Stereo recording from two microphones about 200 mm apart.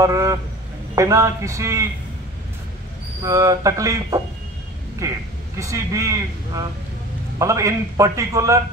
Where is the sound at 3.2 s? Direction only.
15° right (ahead or behind).